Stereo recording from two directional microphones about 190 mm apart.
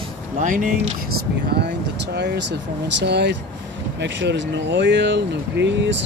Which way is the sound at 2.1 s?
60° right (ahead or behind).